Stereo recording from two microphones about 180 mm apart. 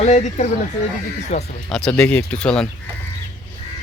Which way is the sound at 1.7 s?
5° left (ahead or behind).